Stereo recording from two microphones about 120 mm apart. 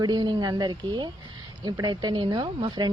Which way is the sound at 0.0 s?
35° right (ahead or behind).